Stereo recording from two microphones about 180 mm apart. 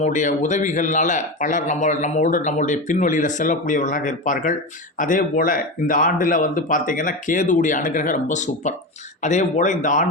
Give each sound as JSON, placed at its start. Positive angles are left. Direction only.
{"t": 0.0, "sound": "speech", "side_deg": 40}